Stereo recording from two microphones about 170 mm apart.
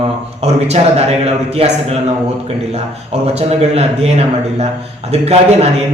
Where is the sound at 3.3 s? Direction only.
35° right (ahead or behind).